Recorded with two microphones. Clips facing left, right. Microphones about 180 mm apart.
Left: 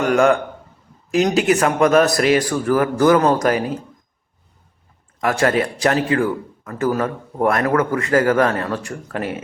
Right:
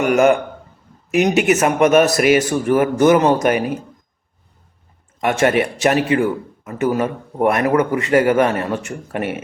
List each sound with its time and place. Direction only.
0.0 s a man's voice: 20° right (ahead or behind)
2.2 s a man's voice: 5° right (ahead or behind)
2.5 s a man's voice: 20° right (ahead or behind)
5.2 s a man's voice: 25° right (ahead or behind)